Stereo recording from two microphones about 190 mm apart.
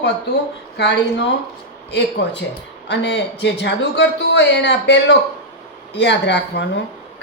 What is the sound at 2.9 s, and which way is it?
Speech, 70° left (ahead or behind).